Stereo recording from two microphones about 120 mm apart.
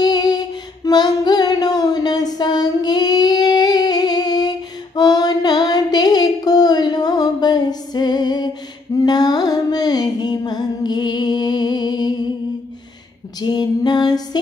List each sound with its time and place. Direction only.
0.0 s music: 35° left (ahead or behind)
0.8 s a sound: 35° left (ahead or behind)
9.0 s music: 35° left (ahead or behind)
13.4 s female singing: 35° left (ahead or behind)